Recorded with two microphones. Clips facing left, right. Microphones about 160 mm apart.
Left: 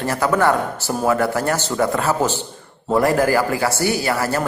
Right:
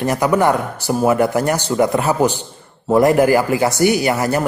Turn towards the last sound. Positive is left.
turn(degrees=-20)  # may be behind; listen again after turning